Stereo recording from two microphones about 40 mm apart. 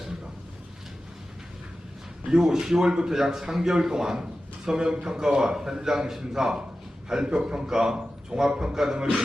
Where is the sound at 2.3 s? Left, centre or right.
Centre.